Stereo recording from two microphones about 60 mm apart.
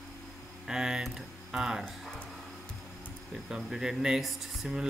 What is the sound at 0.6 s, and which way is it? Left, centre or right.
Speech, centre.